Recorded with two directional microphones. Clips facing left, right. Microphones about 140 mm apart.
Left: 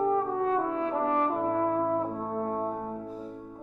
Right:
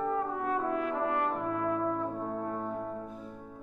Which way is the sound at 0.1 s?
30° left (ahead or behind).